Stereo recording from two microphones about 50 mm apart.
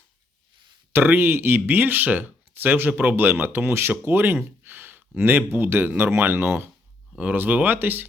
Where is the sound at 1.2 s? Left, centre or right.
Right.